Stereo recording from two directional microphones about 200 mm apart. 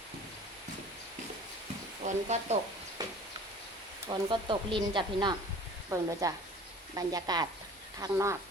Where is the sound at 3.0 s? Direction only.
20° right (ahead or behind).